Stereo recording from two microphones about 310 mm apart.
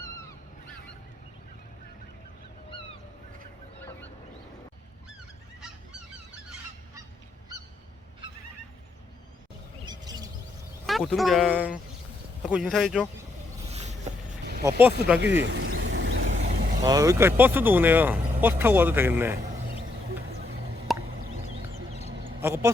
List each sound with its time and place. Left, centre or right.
9.8 s bird: centre
10.8 s speech: centre
13.7 s a sound: right
14.6 s speech: centre
15.2 s vehicle: right
16.4 s speech: centre
20.1 s vehicle: right
20.9 s a sound: centre
22.2 s duck: centre